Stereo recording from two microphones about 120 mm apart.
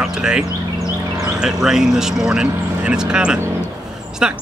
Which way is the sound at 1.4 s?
5° right (ahead or behind).